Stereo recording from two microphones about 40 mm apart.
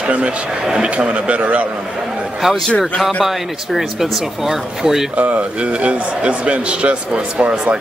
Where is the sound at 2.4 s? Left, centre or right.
Centre.